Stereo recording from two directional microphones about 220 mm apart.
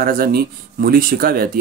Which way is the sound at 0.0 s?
40° right (ahead or behind).